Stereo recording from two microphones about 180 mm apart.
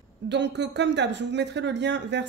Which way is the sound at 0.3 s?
75° right (ahead or behind).